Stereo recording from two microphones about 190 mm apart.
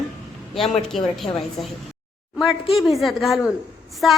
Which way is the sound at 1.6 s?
Centre (ahead or behind).